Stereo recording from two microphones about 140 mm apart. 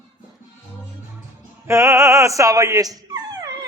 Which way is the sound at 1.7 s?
20° right (ahead or behind).